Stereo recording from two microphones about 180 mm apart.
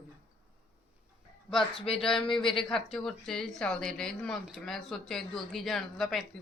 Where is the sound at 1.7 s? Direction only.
30° left (ahead or behind).